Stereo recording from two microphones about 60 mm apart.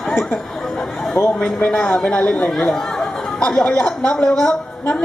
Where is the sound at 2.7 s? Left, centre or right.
Centre.